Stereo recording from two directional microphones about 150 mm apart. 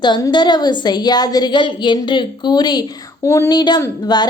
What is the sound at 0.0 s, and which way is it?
A woman's voice, 30° left (ahead or behind).